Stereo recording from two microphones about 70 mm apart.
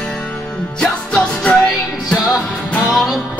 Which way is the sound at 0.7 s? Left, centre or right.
Centre.